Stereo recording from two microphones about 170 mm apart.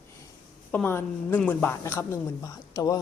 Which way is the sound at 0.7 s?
10° left (ahead or behind).